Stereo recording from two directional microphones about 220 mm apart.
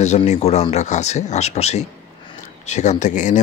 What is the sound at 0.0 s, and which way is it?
Speech, 30° left (ahead or behind).